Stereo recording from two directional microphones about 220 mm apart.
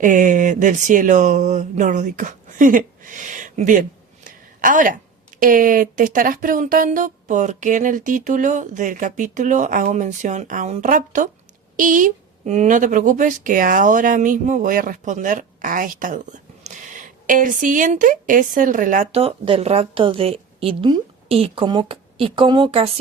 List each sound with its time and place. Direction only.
0.0 s a woman's voice: 35° right (ahead or behind)